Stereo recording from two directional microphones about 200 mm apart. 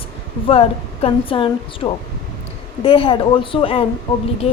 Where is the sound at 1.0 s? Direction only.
25° left (ahead or behind).